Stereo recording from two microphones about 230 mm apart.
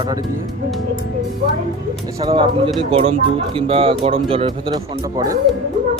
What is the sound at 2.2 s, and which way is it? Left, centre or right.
Speech, centre.